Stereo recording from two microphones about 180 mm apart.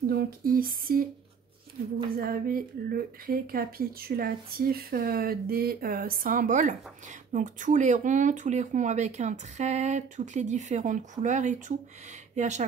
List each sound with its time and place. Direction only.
0.0 s speech: 55° right (ahead or behind)
2.0 s speech: 55° right (ahead or behind)